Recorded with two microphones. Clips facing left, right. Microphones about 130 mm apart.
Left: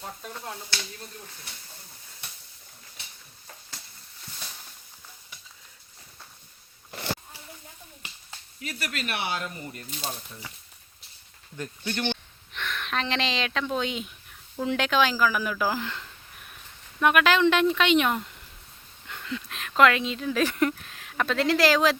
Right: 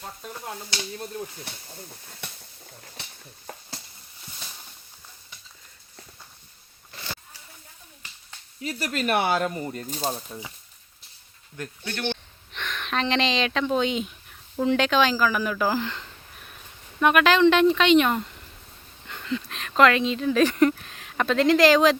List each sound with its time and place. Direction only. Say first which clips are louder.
0.0 s speech: even; 5° right (ahead or behind)
6.9 s a sound: left 6 dB; 60° left (ahead or behind)
8.6 s speech: right 7 dB; 40° right (ahead or behind)
9.6 s speech: right 7 dB; 35° right (ahead or behind)
12.0 s a sound: right 1 dB; 5° left (ahead or behind)
13.7 s speech: right 5 dB; centre (ahead or behind)